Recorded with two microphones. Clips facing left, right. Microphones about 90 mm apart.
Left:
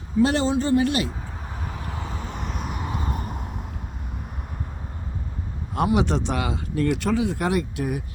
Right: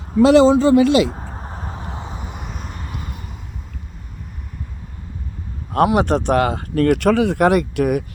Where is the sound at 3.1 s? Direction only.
45° left (ahead or behind).